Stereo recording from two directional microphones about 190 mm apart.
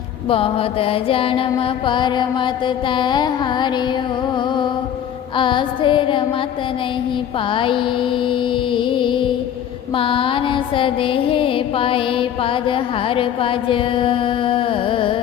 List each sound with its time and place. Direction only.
0.3 s music: 30° left (ahead or behind)
5.4 s music: 25° left (ahead or behind)
7.5 s music: 25° left (ahead or behind)